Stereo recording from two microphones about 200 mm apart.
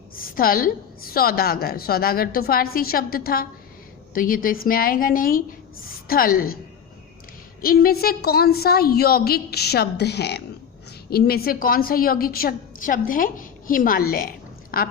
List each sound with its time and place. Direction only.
0.2 s a woman's voice: 45° left (ahead or behind)
7.6 s a woman's voice: 50° left (ahead or behind)